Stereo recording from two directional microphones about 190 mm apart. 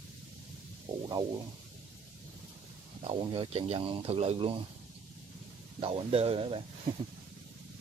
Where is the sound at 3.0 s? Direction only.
25° right (ahead or behind).